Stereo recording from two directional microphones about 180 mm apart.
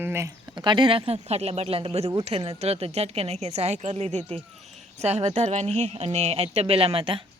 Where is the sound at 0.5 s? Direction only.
25° right (ahead or behind).